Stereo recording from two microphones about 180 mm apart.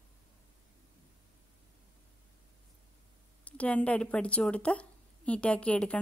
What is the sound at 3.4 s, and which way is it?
A woman's voice, 5° left (ahead or behind).